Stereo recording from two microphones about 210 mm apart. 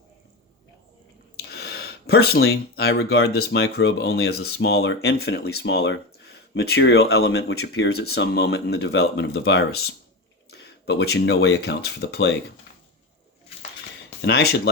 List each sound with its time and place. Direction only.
1.4 s speech: 50° left (ahead or behind)
14.2 s speech: 50° left (ahead or behind)